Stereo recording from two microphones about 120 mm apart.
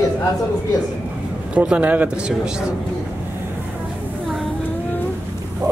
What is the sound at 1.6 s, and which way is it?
Speech, 10° right (ahead or behind).